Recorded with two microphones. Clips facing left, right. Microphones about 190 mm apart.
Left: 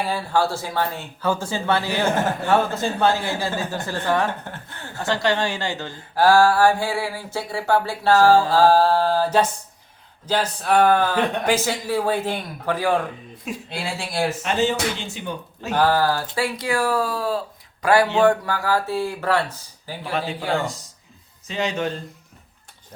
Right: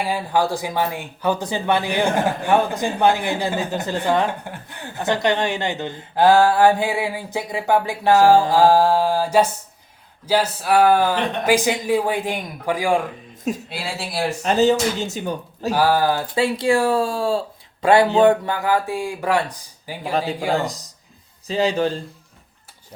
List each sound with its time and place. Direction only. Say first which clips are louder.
0.0 s speech: right 1 dB; 15° right (ahead or behind)
14.4 s speech: right 9 dB; 40° right (ahead or behind)
15.7 s speech: right 1 dB; 10° right (ahead or behind)
20.1 s speech: right 4 dB; 35° right (ahead or behind)
21.4 s speech: right 5 dB; 35° right (ahead or behind)